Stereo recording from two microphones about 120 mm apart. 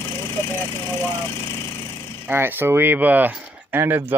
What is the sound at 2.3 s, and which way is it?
Speech, 15° right (ahead or behind).